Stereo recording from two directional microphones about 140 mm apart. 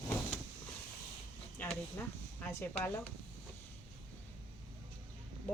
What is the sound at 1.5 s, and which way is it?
Speech, 15° left (ahead or behind).